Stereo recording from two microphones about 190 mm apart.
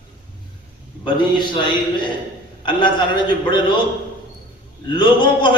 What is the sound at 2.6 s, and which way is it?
Speech, 25° left (ahead or behind).